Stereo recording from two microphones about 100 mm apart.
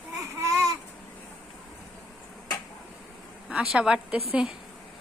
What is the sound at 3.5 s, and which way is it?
A woman's voice, 5° right (ahead or behind).